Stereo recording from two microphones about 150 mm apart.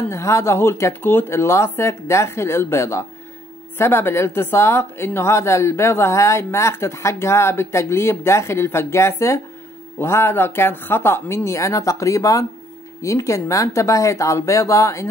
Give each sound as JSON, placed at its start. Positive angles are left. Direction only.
{"t": 0.1, "sound": "speech", "side_deg": 20}